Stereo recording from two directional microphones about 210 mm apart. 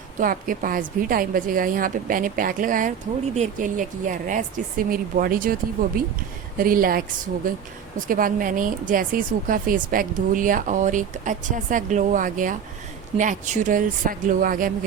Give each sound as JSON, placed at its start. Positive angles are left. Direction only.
{"t": 0.2, "sound": "a woman's voice", "side_deg": -40}